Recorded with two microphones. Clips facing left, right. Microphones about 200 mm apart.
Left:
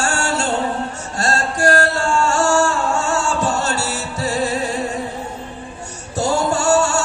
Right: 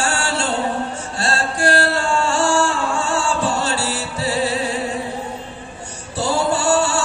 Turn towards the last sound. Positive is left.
turn(degrees=45)  # may be behind; listen again after turning